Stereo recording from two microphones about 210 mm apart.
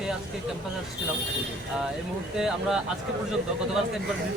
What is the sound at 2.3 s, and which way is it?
Speech, centre (ahead or behind).